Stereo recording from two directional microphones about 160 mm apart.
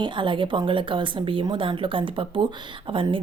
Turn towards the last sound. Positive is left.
turn(degrees=-30)  # may be behind; listen again after turning